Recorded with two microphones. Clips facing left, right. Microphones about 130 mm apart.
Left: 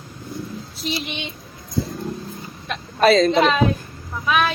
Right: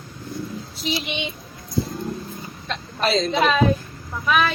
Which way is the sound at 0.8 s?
Centre (ahead or behind).